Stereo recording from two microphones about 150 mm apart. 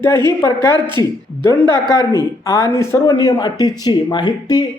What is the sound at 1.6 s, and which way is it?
Speech, 30° right (ahead or behind).